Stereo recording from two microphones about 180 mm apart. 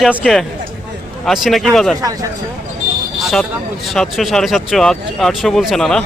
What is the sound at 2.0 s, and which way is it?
Speech, 20° right (ahead or behind).